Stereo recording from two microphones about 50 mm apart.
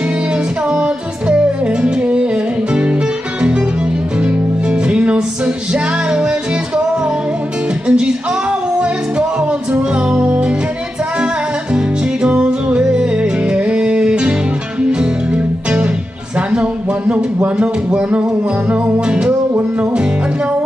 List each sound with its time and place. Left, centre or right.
0.7 s music: right
4.2 s music: right
7.9 s music: centre
11.7 s music: right
17.6 s music: right